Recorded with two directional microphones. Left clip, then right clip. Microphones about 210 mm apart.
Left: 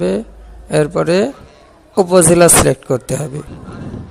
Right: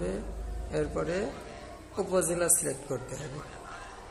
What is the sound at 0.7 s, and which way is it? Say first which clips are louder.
A man's voice: left 17 dB; 45° left (ahead or behind).